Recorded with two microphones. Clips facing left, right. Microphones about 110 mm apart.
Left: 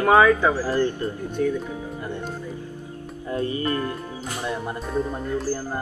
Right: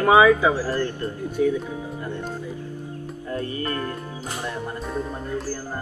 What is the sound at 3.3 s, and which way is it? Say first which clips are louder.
Music: left 3 dB; 15° left (ahead or behind).